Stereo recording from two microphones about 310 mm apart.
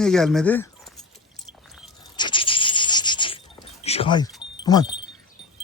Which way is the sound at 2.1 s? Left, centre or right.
Centre.